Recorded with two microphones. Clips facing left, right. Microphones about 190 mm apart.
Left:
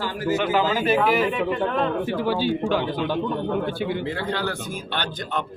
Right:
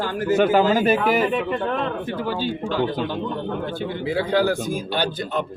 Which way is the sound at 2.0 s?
10° left (ahead or behind).